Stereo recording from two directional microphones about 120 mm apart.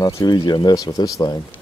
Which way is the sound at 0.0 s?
35° left (ahead or behind).